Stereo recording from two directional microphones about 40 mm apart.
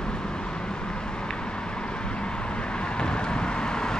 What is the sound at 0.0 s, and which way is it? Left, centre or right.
Vehicle, centre.